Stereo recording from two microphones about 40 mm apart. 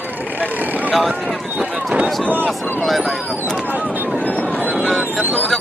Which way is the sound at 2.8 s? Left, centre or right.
Centre.